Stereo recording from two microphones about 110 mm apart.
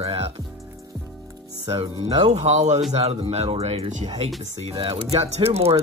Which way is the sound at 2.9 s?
70° right (ahead or behind).